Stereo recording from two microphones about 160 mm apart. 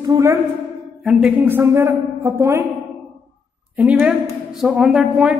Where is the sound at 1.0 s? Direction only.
10° right (ahead or behind).